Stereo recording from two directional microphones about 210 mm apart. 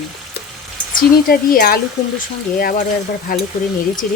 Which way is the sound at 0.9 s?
40° left (ahead or behind).